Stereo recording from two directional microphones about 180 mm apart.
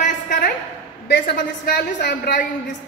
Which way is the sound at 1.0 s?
65° left (ahead or behind).